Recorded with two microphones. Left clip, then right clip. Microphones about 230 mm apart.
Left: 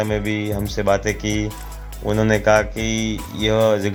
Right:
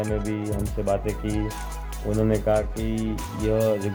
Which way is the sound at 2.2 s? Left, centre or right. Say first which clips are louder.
Left 7 dB; centre.